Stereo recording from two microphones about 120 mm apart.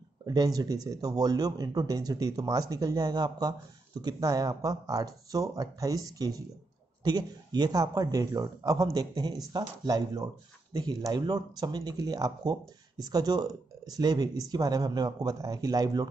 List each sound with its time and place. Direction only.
0.3 s speech: 30° right (ahead or behind)